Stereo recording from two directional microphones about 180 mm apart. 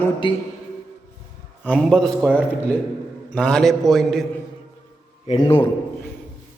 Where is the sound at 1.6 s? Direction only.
5° left (ahead or behind).